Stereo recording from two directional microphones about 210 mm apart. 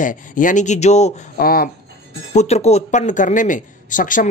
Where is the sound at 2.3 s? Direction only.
30° left (ahead or behind).